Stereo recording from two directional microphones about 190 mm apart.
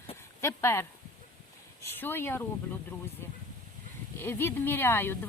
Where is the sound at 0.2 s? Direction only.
15° left (ahead or behind).